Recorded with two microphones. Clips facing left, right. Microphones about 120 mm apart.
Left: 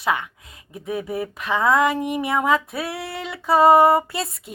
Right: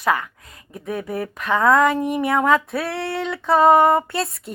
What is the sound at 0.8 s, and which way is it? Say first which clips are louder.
A woman's voice: even; 5° left (ahead or behind).